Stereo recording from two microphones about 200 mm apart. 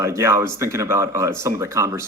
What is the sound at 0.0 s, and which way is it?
Speech, 15° right (ahead or behind).